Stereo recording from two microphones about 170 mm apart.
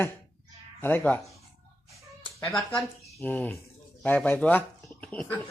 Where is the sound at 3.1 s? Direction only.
10° left (ahead or behind).